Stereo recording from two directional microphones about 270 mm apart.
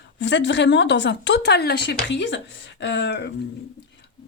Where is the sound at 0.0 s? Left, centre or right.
Left.